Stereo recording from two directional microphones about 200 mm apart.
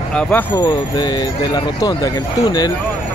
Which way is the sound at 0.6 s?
20° left (ahead or behind).